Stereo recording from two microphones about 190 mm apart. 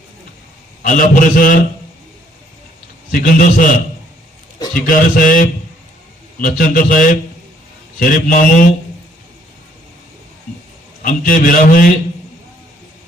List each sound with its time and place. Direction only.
0.8 s a man's voice: 45° left (ahead or behind)
3.1 s a man's voice: 45° left (ahead or behind)
4.7 s a man's voice: 45° left (ahead or behind)
11.0 s a man's voice: 45° left (ahead or behind)